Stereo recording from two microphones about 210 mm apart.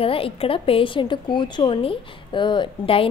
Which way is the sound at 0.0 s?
25° left (ahead or behind).